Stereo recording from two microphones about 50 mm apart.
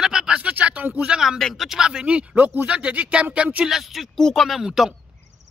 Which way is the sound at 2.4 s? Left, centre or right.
Right.